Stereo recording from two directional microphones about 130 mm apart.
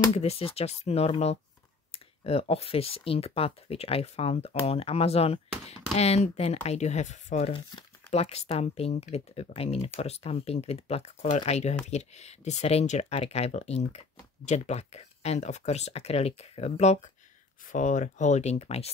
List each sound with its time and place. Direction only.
0.1 s speech: 50° left (ahead or behind); by 7.5 s 65° left (ahead or behind)
8.1 s speech: 55° left (ahead or behind)
11.2 s speech: 60° left (ahead or behind)
17.6 s speech: 75° left (ahead or behind); by 18.9 s 55° left (ahead or behind)